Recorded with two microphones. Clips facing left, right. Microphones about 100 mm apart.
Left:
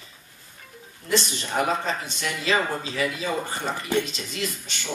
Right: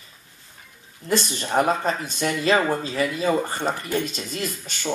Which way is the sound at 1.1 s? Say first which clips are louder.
Right 2 dB; 45° right (ahead or behind).